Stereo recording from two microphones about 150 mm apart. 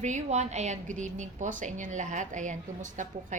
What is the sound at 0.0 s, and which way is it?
A woman's voice, 50° right (ahead or behind).